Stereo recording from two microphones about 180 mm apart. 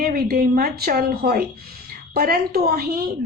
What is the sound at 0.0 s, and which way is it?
A woman's voice, 55° right (ahead or behind).